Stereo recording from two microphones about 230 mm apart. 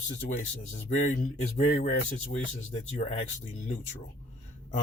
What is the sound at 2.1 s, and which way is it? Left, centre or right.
Speech, left.